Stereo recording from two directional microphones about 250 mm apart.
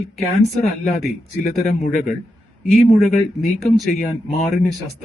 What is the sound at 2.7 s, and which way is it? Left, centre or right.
Speech, centre.